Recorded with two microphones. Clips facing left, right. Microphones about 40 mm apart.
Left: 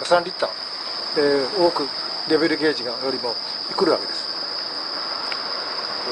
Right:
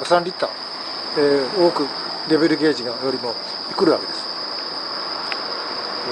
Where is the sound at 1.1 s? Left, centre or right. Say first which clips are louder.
Right 2 dB; centre.